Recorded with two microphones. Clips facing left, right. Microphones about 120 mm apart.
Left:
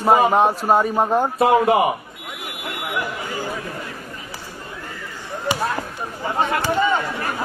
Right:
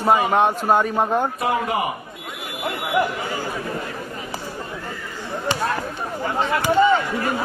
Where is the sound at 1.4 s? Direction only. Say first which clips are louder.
Left 7 dB; 25° left (ahead or behind).